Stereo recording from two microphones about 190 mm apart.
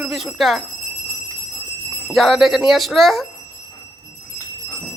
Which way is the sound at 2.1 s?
Centre (ahead or behind).